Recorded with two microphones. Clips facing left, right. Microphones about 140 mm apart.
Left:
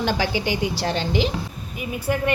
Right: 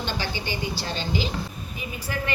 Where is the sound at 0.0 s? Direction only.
90° left.